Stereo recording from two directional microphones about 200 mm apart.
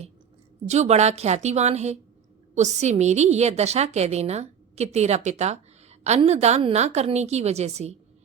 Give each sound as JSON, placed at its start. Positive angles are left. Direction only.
{"t": 0.7, "sound": "a woman's voice", "side_deg": -35}